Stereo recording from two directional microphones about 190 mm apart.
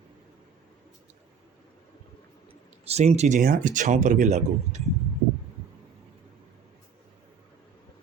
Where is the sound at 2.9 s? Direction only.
35° right (ahead or behind).